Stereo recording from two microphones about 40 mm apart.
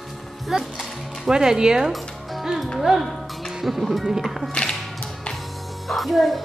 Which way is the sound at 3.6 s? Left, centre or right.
Centre.